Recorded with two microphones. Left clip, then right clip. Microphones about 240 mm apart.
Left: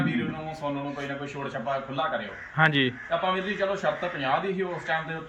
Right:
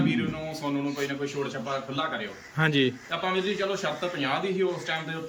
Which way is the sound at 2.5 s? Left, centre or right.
Centre.